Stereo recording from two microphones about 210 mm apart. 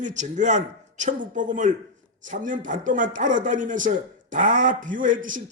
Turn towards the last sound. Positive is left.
turn(degrees=-40)  # may be behind; listen again after turning